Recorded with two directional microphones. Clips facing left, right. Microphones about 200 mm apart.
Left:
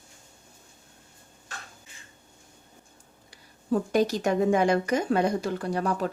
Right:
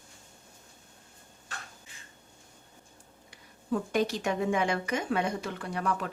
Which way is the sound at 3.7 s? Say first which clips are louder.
Left 5 dB; 40° left (ahead or behind).